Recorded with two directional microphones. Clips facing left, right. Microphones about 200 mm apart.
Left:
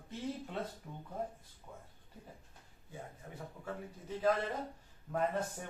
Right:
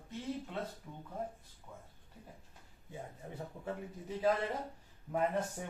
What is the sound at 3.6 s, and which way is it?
Speech, 15° right (ahead or behind).